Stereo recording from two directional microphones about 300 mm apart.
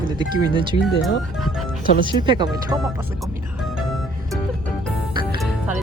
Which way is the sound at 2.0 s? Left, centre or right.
Centre.